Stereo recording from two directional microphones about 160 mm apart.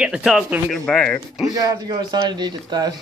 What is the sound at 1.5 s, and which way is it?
A man's voice, 25° right (ahead or behind).